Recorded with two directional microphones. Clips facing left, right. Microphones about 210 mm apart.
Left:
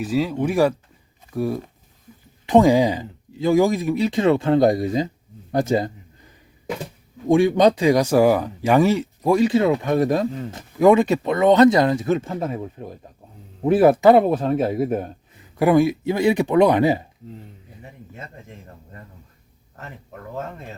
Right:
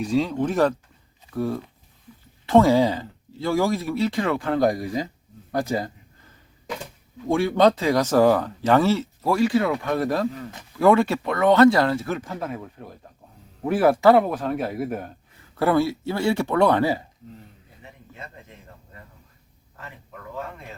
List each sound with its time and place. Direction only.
0.0 s speech: 5° left (ahead or behind); by 5.0 s 20° left (ahead or behind)
5.5 s a sound: 25° left (ahead or behind)
7.3 s speech: 15° left (ahead or behind)